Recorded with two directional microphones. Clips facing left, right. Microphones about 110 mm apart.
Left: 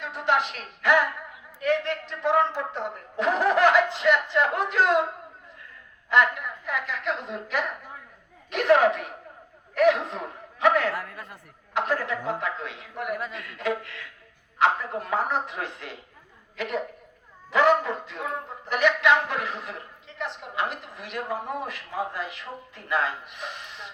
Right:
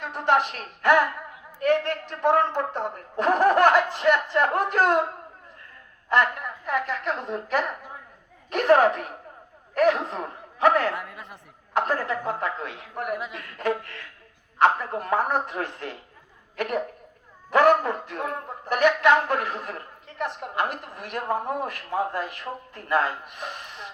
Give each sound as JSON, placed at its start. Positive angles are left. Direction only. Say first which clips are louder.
{"t": 0.0, "sound": "a woman's voice", "louder": "right 3 dB", "side_deg": -50}
{"t": 6.7, "sound": "a man's voice", "louder": "right 3 dB", "side_deg": -45}
{"t": 10.9, "sound": "speech", "louder": "even", "side_deg": -20}
{"t": 11.7, "sound": "a man's voice", "louder": "right 2 dB", "side_deg": -45}